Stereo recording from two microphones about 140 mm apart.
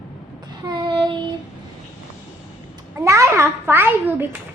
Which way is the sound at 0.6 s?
35° right (ahead or behind).